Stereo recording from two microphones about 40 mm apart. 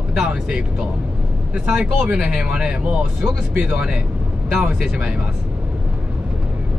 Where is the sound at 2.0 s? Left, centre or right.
Right.